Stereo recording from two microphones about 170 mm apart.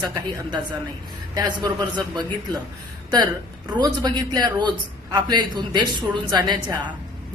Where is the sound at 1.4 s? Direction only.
25° right (ahead or behind).